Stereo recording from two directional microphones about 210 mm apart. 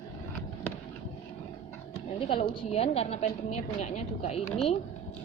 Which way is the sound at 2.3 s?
25° left (ahead or behind).